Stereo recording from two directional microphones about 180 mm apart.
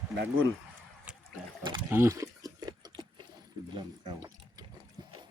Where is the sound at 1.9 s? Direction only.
10° right (ahead or behind).